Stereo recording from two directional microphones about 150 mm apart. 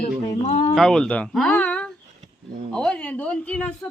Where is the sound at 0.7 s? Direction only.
5° left (ahead or behind).